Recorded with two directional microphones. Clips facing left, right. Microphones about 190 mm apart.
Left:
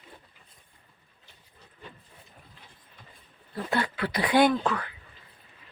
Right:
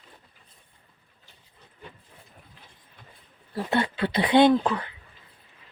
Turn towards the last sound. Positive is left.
turn(degrees=-20)  # may be behind; listen again after turning